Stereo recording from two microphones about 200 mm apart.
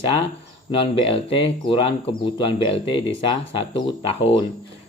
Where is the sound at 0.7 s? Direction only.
25° left (ahead or behind).